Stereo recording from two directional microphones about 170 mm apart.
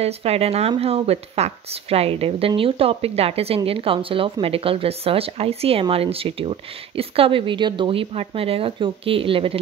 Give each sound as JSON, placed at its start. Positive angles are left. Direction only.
{"t": 0.0, "sound": "speech", "side_deg": -35}